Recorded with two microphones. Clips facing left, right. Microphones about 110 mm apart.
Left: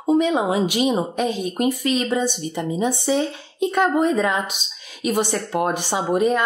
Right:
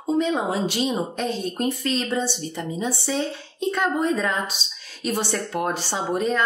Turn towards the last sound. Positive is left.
turn(degrees=15)  # may be behind; listen again after turning